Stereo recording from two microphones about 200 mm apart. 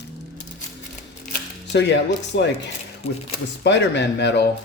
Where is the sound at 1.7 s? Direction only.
60° left (ahead or behind).